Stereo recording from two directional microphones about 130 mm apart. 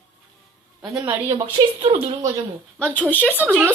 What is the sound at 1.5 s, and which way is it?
Speech, 40° right (ahead or behind).